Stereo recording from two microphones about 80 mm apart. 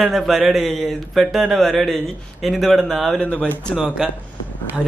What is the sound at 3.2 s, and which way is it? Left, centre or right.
Speech, centre.